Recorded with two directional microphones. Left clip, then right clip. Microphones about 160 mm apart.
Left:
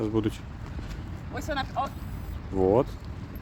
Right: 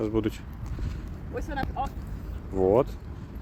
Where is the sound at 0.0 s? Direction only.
10° left (ahead or behind).